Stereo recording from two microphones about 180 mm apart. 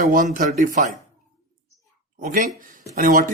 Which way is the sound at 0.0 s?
50° right (ahead or behind).